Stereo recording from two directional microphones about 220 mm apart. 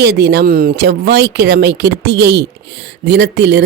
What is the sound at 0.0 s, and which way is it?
Speech, 50° right (ahead or behind).